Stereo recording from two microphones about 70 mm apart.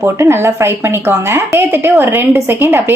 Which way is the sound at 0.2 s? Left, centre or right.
Right.